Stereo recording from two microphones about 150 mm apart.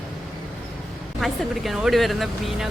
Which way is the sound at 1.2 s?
Centre (ahead or behind).